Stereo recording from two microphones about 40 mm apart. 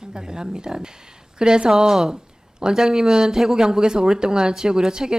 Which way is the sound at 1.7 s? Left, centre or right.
Centre.